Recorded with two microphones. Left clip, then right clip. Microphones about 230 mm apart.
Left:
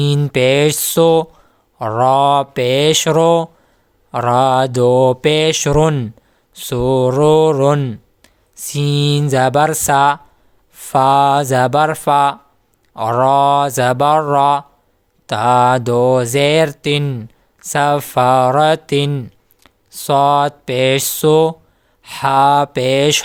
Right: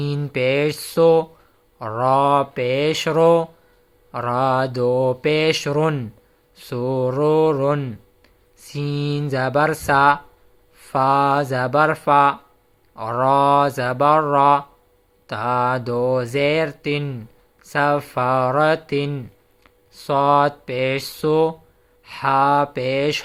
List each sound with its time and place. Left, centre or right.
0.0 s mantra: left